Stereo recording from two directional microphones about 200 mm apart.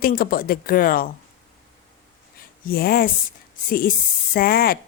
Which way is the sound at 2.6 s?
50° left (ahead or behind).